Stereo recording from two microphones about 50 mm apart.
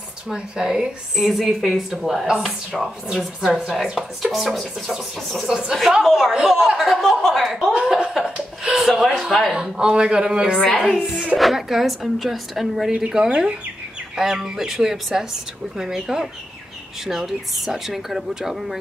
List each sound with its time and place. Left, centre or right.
0.3 s a woman's voice: centre
3.4 s speech: centre
3.8 s a woman's voice: centre
6.0 s a woman's voice: centre
7.5 s a woman's voice: centre
9.5 s speech: centre
11.3 s a woman's voice: centre
13.3 s speech: right
14.1 s speech: centre